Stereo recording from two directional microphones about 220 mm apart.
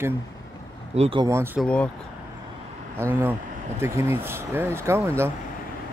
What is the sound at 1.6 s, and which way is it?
Speech, 5° left (ahead or behind).